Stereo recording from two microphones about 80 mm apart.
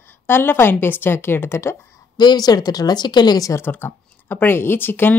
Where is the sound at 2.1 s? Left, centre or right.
Left.